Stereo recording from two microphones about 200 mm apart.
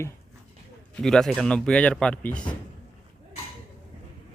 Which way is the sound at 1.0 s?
Centre (ahead or behind).